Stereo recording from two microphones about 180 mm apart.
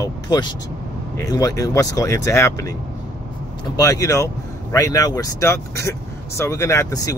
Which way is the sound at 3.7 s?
20° left (ahead or behind).